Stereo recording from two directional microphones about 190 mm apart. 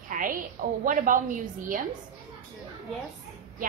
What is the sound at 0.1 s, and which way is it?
A woman's voice, 45° right (ahead or behind).